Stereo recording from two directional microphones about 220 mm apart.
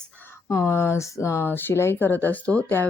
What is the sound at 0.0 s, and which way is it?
Speech, 10° left (ahead or behind).